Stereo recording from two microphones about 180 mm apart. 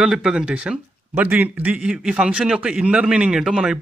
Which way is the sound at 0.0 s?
5° right (ahead or behind).